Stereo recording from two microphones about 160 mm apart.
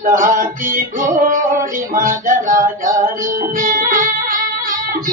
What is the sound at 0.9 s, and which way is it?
Music, 55° right (ahead or behind).